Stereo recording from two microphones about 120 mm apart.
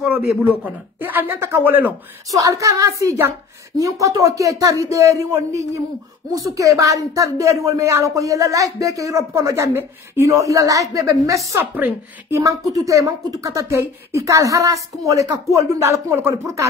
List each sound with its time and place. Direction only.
0.0 s speech: 10° right (ahead or behind)
2.3 s speech: 25° right (ahead or behind)